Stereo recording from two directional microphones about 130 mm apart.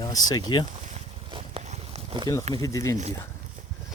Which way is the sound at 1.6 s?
55° right (ahead or behind).